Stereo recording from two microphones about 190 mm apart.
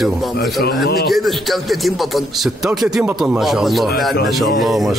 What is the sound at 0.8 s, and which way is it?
Speech, 55° left (ahead or behind).